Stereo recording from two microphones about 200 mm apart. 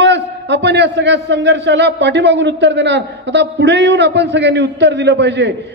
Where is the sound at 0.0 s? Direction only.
60° right (ahead or behind).